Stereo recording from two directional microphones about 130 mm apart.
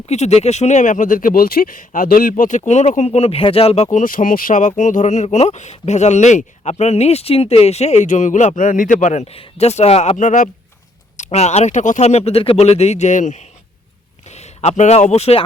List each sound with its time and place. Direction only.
0.1 s speech: 55° left (ahead or behind)
3.9 s speech: 90° left; by 10.2 s 50° left (ahead or behind)
10.2 s speech: 80° left
11.2 s speech: 60° left (ahead or behind)
14.3 s speech: 55° left (ahead or behind)